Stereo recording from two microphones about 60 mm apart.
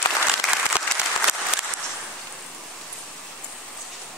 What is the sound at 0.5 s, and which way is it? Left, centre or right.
Applause, centre.